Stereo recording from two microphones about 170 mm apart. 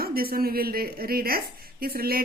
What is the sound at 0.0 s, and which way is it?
Speech, 60° right (ahead or behind).